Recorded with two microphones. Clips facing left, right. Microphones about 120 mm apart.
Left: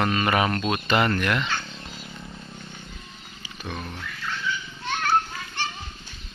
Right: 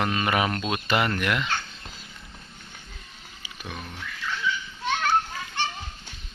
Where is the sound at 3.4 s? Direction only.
10° right (ahead or behind).